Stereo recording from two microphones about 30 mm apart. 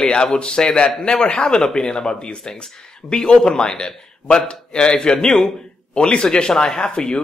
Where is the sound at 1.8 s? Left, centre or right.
Left.